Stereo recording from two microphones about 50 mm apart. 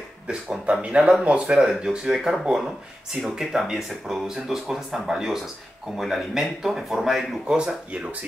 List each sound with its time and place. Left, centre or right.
0.3 s speech: right; by 7.2 s centre
7.4 s speech: centre